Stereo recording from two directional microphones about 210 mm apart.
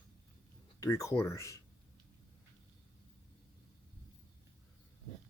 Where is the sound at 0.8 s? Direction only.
15° left (ahead or behind).